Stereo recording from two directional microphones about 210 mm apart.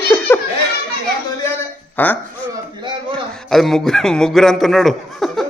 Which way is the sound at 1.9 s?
10° left (ahead or behind).